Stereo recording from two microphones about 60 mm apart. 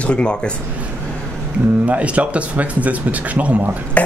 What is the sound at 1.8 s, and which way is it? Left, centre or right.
A man's voice, right.